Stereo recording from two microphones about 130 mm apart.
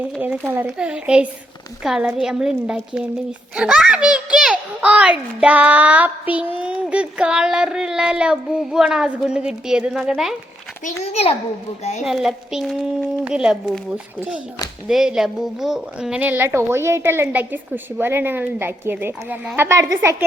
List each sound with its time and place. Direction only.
0.0 s a child's voice: 15° right (ahead or behind)
10.8 s a child's voice: 55° left (ahead or behind)
12.0 s a child's voice: centre (ahead or behind); by 20.2 s 20° right (ahead or behind)